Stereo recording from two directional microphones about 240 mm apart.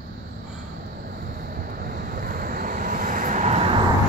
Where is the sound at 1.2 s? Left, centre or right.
Right.